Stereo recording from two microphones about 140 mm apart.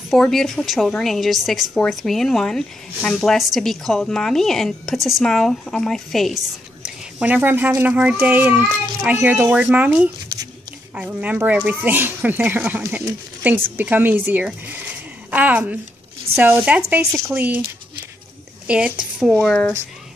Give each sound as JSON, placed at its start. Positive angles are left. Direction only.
{"t": 0.1, "sound": "speech", "side_deg": 0}
{"t": 18.7, "sound": "a woman's voice", "side_deg": -10}
{"t": 19.4, "sound": "speech", "side_deg": 5}